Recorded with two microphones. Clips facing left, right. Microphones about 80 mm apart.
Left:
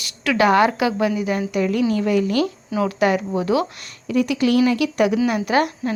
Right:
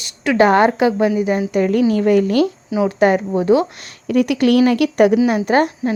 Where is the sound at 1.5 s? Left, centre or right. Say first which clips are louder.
Right 4 dB; right.